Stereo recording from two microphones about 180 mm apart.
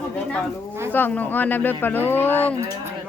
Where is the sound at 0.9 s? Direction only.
10° left (ahead or behind).